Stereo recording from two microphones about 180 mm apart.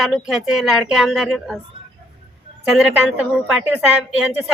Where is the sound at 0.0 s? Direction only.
Centre (ahead or behind).